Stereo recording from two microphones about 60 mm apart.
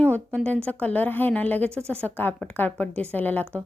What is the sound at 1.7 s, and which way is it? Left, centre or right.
Speech, right.